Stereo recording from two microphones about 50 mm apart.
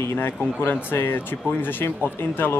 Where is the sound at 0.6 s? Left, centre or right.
Left.